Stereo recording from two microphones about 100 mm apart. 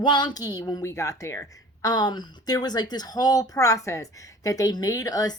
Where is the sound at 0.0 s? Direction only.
50° left (ahead or behind); by 1.9 s 30° left (ahead or behind).